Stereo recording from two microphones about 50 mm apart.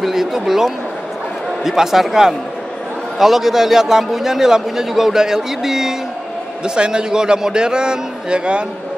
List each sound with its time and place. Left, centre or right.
0.0 s a man's voice: centre